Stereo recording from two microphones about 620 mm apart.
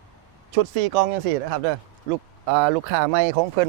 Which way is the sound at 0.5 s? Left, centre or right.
Right.